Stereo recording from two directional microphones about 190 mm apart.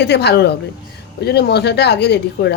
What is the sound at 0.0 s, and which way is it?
Speech, 60° left (ahead or behind).